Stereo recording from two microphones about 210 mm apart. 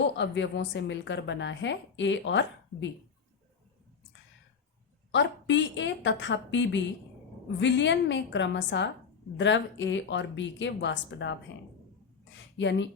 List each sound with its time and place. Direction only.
0.2 s a woman's voice: 60° left (ahead or behind)
5.1 s a woman's voice: 60° left (ahead or behind)
12.5 s a woman's voice: 60° left (ahead or behind)